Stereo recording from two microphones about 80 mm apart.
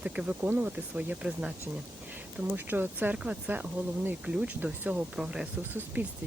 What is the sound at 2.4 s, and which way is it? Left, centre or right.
Speech, right.